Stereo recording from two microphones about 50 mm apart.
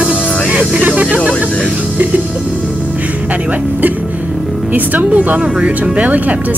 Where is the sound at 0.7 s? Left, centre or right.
Right.